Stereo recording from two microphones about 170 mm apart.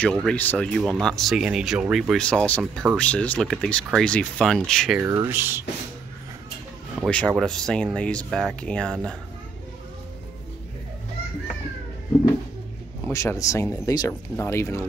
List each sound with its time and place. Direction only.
0.0 s speech: 5° left (ahead or behind)
5.0 s speech: 15° right (ahead or behind)
7.1 s speech: 5° left (ahead or behind)
13.0 s speech: 15° left (ahead or behind)